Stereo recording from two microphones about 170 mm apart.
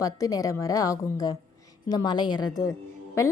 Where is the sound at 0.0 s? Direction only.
20° left (ahead or behind).